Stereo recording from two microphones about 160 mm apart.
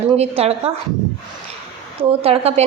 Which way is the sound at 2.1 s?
35° right (ahead or behind).